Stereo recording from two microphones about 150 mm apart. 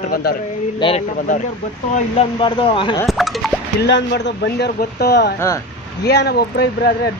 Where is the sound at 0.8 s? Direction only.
30° left (ahead or behind).